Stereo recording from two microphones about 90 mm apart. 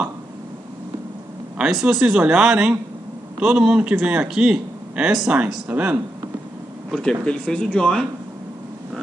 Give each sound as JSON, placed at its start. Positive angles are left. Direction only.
{"t": 1.6, "sound": "a man's voice", "side_deg": -5}
{"t": 6.9, "sound": "speech", "side_deg": 5}